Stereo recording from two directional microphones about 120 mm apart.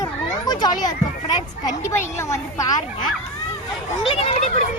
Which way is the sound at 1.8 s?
25° left (ahead or behind).